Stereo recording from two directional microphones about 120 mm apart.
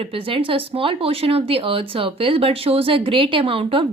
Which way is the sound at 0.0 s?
50° right (ahead or behind).